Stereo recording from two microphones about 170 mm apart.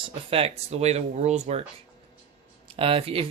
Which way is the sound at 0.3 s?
35° right (ahead or behind).